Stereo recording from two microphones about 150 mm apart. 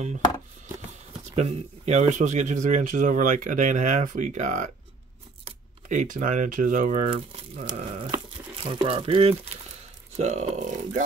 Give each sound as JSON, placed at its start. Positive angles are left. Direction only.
{"t": 1.3, "sound": "speech", "side_deg": -45}
{"t": 7.1, "sound": "speech", "side_deg": -45}
{"t": 8.6, "sound": "speech", "side_deg": -35}